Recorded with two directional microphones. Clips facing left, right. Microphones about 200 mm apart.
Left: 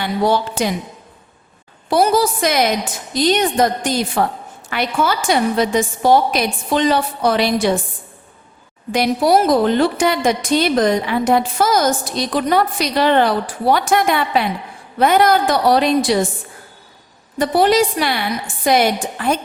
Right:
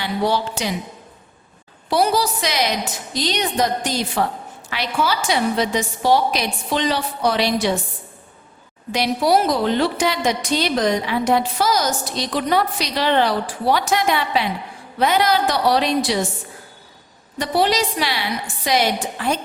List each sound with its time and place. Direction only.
0.0 s a woman's voice: 50° left (ahead or behind)
1.9 s a woman's voice: 50° left (ahead or behind)
8.9 s a woman's voice: 50° left (ahead or behind)
17.3 s a woman's voice: 50° left (ahead or behind)